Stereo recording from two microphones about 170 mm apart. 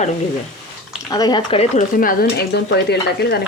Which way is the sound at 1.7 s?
55° left (ahead or behind).